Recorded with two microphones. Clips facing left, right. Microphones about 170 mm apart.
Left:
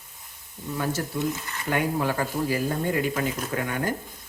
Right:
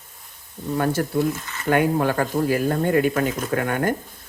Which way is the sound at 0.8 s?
55° right (ahead or behind).